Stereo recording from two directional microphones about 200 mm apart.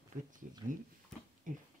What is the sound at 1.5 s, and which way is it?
Speech, 40° right (ahead or behind).